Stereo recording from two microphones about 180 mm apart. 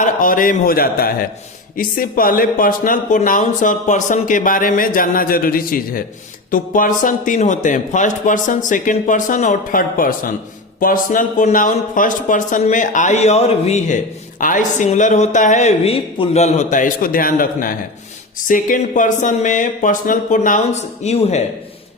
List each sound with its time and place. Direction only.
0.0 s speech: 50° left (ahead or behind)